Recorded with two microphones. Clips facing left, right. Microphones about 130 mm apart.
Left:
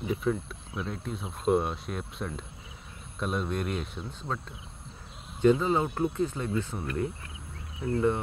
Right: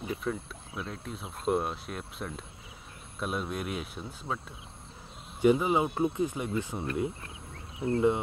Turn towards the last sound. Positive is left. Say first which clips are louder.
# right 1 dB
turn(degrees=-20)  # may be behind; listen again after turning